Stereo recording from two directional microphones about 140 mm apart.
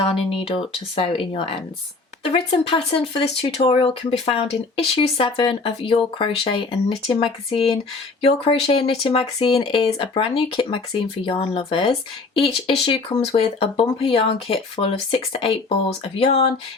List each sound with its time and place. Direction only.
0.0 s speech: 40° left (ahead or behind)